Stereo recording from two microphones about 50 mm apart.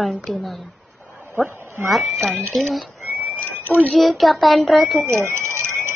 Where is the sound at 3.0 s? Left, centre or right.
Right.